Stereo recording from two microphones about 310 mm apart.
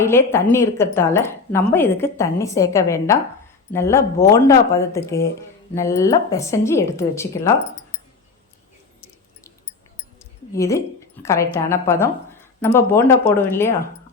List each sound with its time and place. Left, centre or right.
0.0 s a woman's voice: centre
10.5 s a woman's voice: centre